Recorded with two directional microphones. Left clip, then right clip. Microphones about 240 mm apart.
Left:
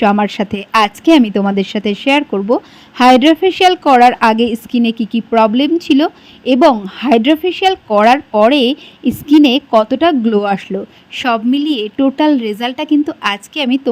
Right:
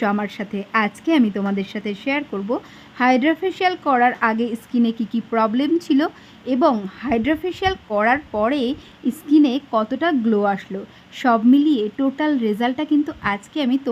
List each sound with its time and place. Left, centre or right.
0.0 s speech: left